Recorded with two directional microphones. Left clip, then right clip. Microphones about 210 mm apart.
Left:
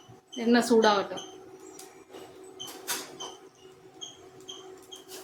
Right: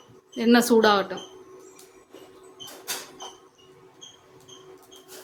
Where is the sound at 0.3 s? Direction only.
40° right (ahead or behind).